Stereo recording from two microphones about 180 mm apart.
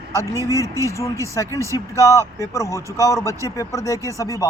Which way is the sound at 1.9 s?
15° left (ahead or behind).